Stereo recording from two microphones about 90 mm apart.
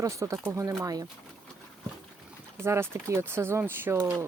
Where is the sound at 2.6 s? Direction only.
30° right (ahead or behind).